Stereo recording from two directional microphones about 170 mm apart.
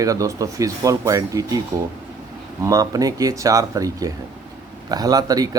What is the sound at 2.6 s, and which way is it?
Speech, 20° right (ahead or behind).